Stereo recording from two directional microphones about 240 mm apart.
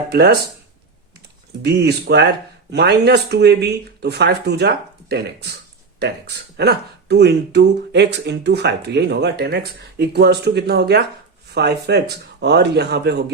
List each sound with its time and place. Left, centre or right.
0.1 s speech: right
1.6 s speech: right